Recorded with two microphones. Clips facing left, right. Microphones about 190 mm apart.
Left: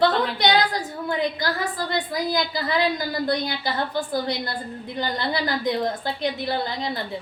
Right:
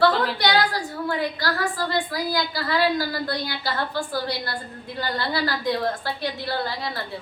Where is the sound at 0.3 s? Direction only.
20° left (ahead or behind).